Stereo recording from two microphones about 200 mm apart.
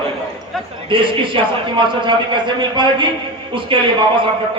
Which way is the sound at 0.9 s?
25° right (ahead or behind).